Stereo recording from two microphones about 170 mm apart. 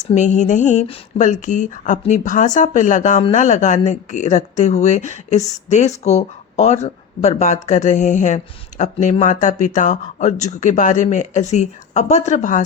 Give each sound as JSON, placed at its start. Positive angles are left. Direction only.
{"t": 0.0, "sound": "speech", "side_deg": 45}